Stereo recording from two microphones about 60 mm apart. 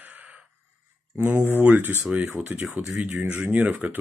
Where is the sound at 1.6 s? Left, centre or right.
Right.